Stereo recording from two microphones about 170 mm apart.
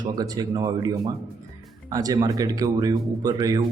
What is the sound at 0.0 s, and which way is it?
Speech, 25° right (ahead or behind).